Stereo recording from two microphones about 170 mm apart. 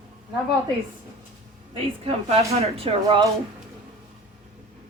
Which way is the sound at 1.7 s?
35° right (ahead or behind).